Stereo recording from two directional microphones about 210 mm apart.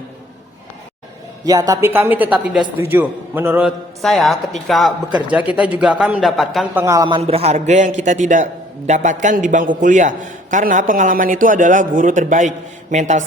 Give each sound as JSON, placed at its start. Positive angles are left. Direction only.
{"t": 1.5, "sound": "a man's voice", "side_deg": -15}
{"t": 4.0, "sound": "a man's voice", "side_deg": 0}
{"t": 6.8, "sound": "a man's voice", "side_deg": -15}